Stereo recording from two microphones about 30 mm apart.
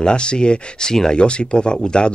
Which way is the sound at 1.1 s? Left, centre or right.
Left.